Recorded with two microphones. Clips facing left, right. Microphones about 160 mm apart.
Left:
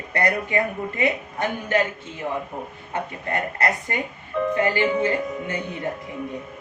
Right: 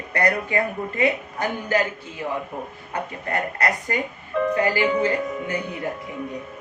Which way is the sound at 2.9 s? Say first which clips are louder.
Even; 25° left (ahead or behind).